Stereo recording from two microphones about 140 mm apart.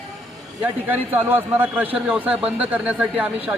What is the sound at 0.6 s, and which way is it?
A man's voice, 15° right (ahead or behind).